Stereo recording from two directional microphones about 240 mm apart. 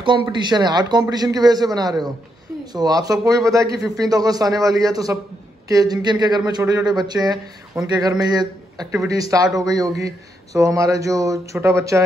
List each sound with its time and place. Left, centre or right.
0.0 s speech: centre